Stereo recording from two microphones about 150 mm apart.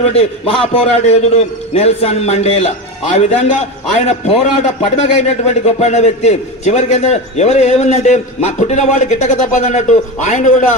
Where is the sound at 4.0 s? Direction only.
45° left (ahead or behind).